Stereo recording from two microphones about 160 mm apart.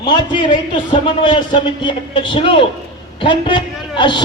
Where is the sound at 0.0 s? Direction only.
30° left (ahead or behind).